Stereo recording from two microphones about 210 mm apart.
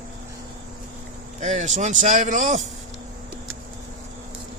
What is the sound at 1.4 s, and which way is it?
Speech, 35° right (ahead or behind).